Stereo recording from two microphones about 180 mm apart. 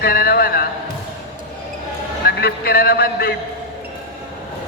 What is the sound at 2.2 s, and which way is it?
A man's voice, 60° left (ahead or behind).